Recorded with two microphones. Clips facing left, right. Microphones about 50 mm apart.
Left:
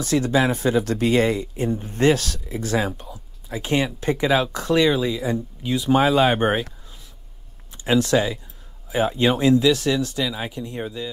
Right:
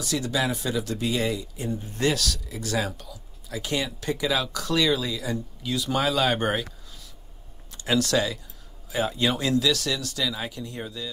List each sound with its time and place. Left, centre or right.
0.0 s speech: left
7.7 s speech: left